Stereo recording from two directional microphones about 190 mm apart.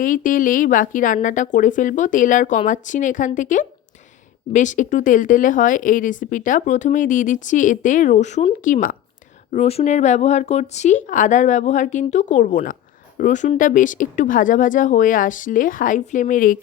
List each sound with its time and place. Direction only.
0.0 s speech: 45° left (ahead or behind)
9.5 s speech: 35° left (ahead or behind)